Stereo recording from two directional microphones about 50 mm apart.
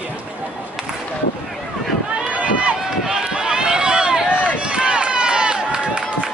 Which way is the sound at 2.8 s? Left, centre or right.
Centre.